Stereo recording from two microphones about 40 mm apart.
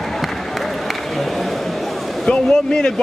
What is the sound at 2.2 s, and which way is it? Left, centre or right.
Speech, centre.